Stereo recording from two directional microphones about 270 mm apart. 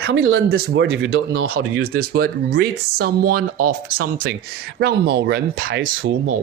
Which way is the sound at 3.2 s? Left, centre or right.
Right.